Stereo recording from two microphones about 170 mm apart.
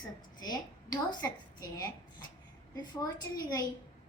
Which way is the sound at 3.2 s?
20° left (ahead or behind).